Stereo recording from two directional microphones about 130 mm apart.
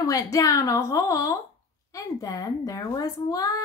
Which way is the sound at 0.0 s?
25° left (ahead or behind).